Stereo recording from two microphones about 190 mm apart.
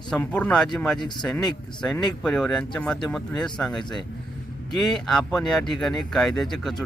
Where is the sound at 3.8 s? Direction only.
25° left (ahead or behind).